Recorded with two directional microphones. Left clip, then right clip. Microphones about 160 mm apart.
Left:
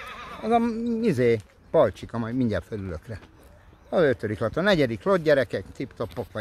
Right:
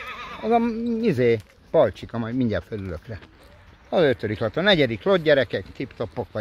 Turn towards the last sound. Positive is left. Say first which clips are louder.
# right 2 dB
turn(degrees=-5)  # may be behind; listen again after turning